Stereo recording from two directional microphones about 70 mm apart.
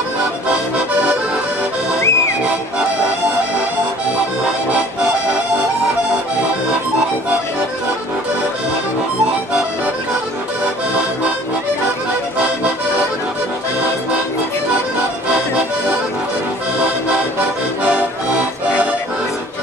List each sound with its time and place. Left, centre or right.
2.0 s music: left
17.8 s accordion: centre